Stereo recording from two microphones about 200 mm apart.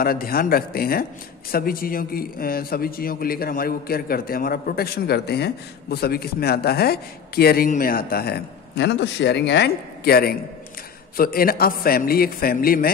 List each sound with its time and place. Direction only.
0.0 s a man's voice: 45° left (ahead or behind)